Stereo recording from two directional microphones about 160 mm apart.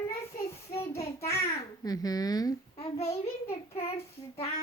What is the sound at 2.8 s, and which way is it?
Child singing, 40° left (ahead or behind).